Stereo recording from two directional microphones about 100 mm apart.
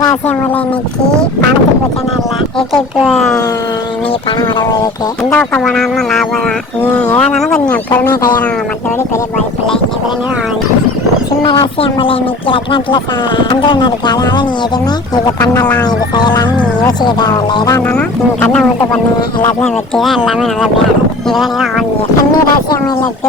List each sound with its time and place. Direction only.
2.7 s speech: centre (ahead or behind)
4.3 s speech: 45° left (ahead or behind)
5.3 s speech: 10° left (ahead or behind)
6.8 s speech: 20° left (ahead or behind)
11.4 s speech: 50° left (ahead or behind); by 15.6 s 35° left (ahead or behind)
15.8 s speech: 45° left (ahead or behind)
17.8 s speech: 15° left (ahead or behind)
19.6 s speech: centre (ahead or behind)